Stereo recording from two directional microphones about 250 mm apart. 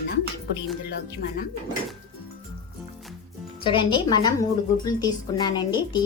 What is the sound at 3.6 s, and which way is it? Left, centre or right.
A woman's voice, centre.